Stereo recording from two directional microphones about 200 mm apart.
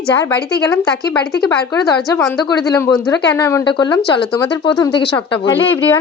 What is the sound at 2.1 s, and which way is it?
A woman's voice, 15° left (ahead or behind).